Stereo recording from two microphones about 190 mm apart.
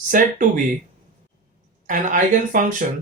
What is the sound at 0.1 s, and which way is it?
Speech, 45° right (ahead or behind).